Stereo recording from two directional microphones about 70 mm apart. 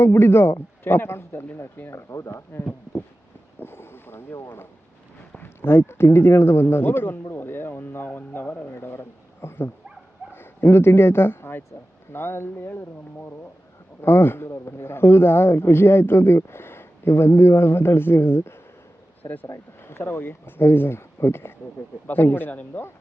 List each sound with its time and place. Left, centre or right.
0.0 s a man's voice: left
2.0 s speech: left
3.6 s boat: left
4.4 s a man's voice: left